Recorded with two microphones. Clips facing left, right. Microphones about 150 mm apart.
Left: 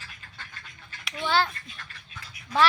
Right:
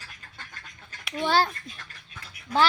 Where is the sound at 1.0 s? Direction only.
40° right (ahead or behind).